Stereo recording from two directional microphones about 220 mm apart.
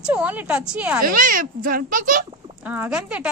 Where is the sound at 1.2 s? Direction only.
40° right (ahead or behind).